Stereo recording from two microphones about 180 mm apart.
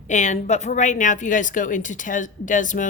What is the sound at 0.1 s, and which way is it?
A woman's voice, 40° left (ahead or behind).